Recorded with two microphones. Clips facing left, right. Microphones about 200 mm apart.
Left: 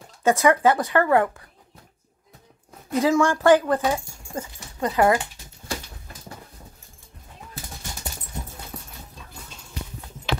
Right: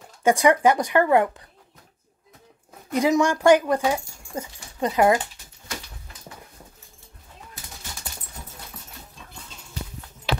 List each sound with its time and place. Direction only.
0.2 s speech: 15° right (ahead or behind)
2.9 s speech: 15° right (ahead or behind)
8.7 s dog: 35° left (ahead or behind)